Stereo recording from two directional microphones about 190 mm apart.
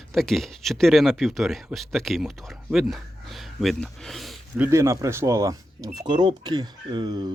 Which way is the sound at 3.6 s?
Centre (ahead or behind).